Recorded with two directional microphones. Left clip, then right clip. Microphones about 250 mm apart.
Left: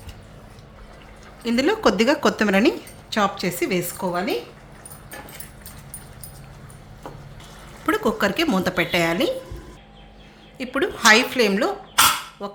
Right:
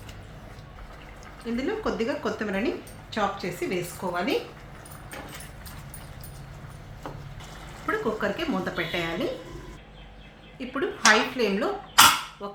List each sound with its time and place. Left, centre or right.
1.5 s a woman's voice: left
7.9 s speech: left
10.6 s speech: left
12.4 s dishes: left